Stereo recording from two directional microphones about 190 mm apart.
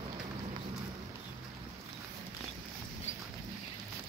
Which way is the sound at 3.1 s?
35° left (ahead or behind).